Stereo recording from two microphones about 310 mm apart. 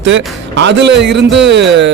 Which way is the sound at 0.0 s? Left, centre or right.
Right.